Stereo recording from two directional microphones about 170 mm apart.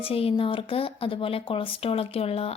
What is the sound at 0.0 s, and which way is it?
Speech, 35° left (ahead or behind).